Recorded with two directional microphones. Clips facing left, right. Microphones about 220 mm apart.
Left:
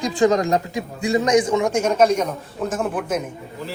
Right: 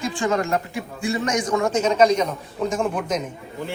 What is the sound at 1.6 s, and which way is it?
A man's voice, 10° left (ahead or behind).